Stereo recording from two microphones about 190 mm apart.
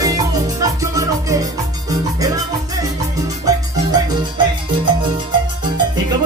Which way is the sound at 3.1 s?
20° right (ahead or behind).